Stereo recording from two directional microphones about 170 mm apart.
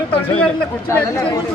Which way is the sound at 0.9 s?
20° left (ahead or behind).